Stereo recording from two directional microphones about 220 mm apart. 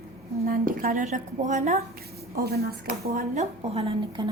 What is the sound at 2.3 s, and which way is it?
Speech, 45° right (ahead or behind).